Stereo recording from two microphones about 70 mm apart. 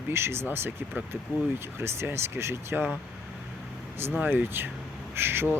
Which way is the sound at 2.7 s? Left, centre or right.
Right.